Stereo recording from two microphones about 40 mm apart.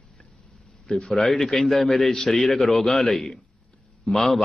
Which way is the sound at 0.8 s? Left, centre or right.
Centre.